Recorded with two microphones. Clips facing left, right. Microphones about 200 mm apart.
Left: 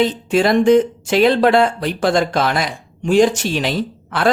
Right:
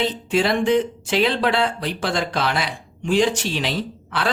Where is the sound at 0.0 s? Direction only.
45° left (ahead or behind).